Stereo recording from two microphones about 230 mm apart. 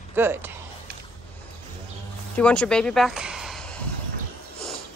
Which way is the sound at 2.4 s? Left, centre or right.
Centre.